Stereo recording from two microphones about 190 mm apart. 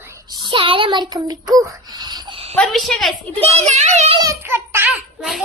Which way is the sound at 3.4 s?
35° right (ahead or behind).